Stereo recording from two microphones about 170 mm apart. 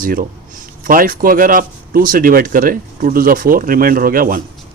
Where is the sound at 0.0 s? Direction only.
55° right (ahead or behind).